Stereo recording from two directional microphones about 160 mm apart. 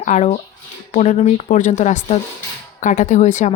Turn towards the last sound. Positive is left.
turn(degrees=50)  # may be behind; listen again after turning